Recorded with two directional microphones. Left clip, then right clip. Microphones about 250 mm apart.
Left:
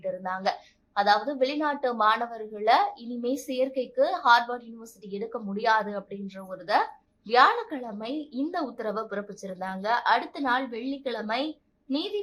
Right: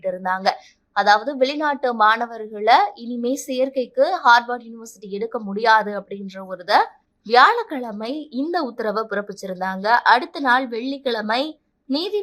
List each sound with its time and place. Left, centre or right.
0.0 s a woman's voice: right